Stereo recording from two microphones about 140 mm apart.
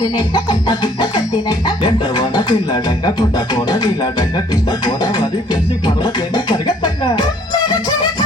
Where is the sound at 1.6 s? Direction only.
30° left (ahead or behind).